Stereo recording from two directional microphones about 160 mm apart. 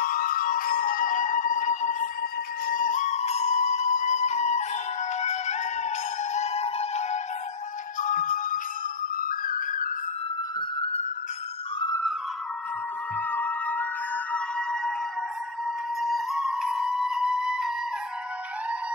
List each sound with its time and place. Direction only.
0.0 s music: 65° left (ahead or behind); by 7.2 s 45° left (ahead or behind)
8.0 s music: 55° left (ahead or behind)
13.3 s music: 10° left (ahead or behind)
16.0 s music: centre (ahead or behind)